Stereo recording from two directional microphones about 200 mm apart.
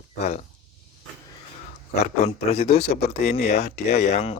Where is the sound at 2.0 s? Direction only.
35° left (ahead or behind).